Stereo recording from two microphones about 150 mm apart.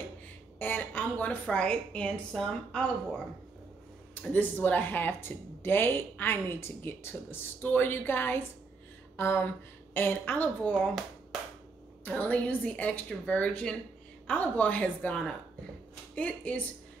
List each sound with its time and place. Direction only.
0.6 s speech: 10° left (ahead or behind)
4.1 s speech: 10° left (ahead or behind)
9.1 s a sound: 15° left (ahead or behind)
9.9 s speech: 15° left (ahead or behind)
10.7 s speech: centre (ahead or behind)
12.0 s speech: 10° left (ahead or behind)